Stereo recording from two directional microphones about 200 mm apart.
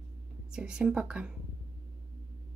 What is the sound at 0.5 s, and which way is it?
Speech, 5° right (ahead or behind).